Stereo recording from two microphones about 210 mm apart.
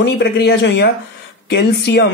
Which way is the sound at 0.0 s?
55° left (ahead or behind).